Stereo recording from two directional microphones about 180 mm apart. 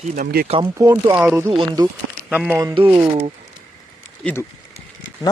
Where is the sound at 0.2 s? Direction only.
55° right (ahead or behind).